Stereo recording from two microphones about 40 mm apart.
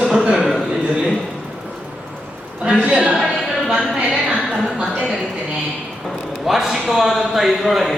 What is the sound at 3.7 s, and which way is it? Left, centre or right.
Speech, centre.